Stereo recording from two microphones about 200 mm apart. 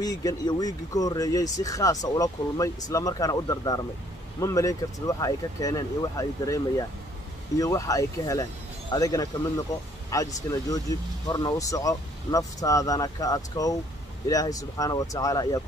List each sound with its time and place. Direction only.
0.0 s speech: 20° left (ahead or behind)